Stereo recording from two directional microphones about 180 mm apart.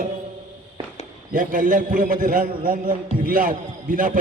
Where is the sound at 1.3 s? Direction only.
50° right (ahead or behind).